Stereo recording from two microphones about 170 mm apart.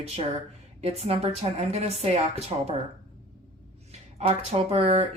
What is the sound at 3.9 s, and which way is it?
Speech, 40° right (ahead or behind).